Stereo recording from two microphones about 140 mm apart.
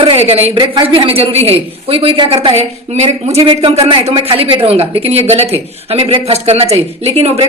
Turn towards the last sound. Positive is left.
turn(degrees=-45)  # may be behind; listen again after turning